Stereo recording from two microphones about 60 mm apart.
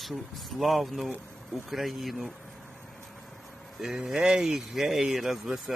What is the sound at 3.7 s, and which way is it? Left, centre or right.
A man's voice, centre.